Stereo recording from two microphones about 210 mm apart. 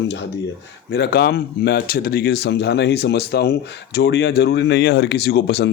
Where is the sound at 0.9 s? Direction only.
50° left (ahead or behind).